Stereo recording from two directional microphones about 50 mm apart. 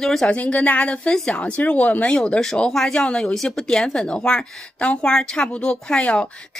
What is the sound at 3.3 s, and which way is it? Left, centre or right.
A woman's voice, centre.